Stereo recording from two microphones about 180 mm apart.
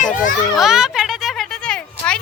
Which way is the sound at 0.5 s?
Centre (ahead or behind).